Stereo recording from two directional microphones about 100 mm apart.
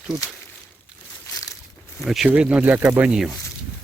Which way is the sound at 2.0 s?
5° right (ahead or behind).